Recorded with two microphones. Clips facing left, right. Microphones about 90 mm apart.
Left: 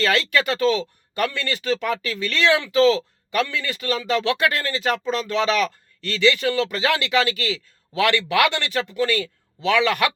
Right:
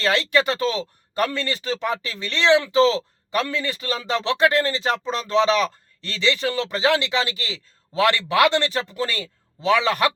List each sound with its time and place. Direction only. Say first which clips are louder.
0.0 s speech: even; 30° right (ahead or behind)